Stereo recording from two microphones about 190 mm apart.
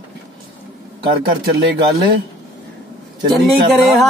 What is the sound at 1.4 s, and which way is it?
Speech, 55° right (ahead or behind).